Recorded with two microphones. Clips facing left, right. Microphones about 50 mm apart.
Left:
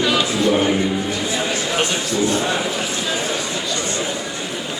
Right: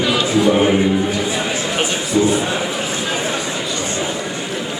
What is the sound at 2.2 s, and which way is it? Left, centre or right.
Speech, centre.